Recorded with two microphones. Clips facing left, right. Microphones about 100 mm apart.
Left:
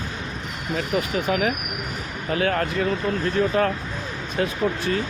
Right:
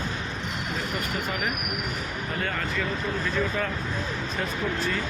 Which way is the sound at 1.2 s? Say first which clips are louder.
Left 7 dB; 85° left.